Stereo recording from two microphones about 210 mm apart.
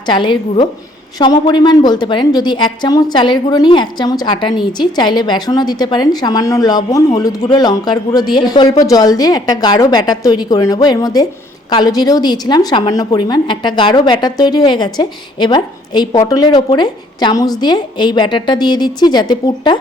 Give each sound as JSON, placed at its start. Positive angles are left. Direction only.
{"t": 0.0, "sound": "a woman's voice", "side_deg": 20}